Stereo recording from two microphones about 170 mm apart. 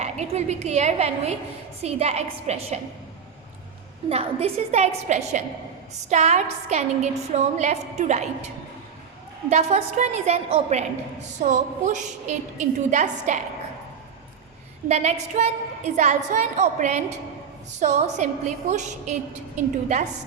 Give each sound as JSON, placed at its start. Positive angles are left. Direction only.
{"t": 0.0, "sound": "a woman's voice", "side_deg": -40}
{"t": 4.1, "sound": "a woman's voice", "side_deg": -35}
{"t": 9.5, "sound": "a woman's voice", "side_deg": -40}
{"t": 14.8, "sound": "a woman's voice", "side_deg": -40}